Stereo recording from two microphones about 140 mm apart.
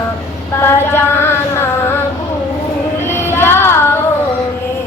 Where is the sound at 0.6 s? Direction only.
15° left (ahead or behind).